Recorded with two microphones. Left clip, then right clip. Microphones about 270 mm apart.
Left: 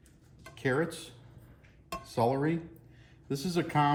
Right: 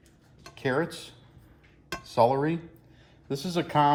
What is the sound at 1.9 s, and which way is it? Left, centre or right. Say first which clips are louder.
Dishes: right 7 dB; right.